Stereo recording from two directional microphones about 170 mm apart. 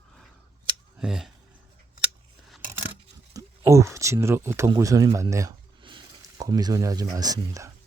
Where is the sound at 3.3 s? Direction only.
20° right (ahead or behind).